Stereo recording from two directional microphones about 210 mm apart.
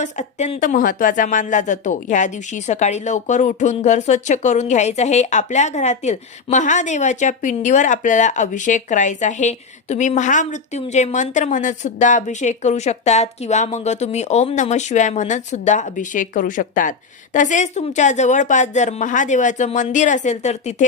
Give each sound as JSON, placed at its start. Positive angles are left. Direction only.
{"t": 0.0, "sound": "a woman's voice", "side_deg": 35}